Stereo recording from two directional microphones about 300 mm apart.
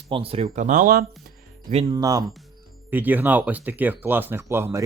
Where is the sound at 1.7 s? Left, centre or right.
Centre.